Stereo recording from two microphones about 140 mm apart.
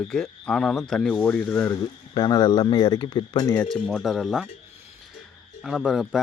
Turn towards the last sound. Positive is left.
turn(degrees=0)  # may be behind; listen again after turning